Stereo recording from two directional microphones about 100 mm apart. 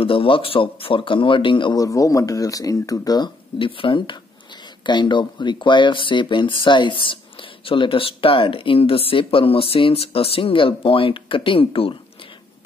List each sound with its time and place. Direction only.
0.0 s speech: 65° left (ahead or behind)
1.8 s speech: 35° left (ahead or behind)
3.5 s speech: 60° left (ahead or behind)
4.8 s speech: 50° left (ahead or behind); by 12.0 s 65° left (ahead or behind)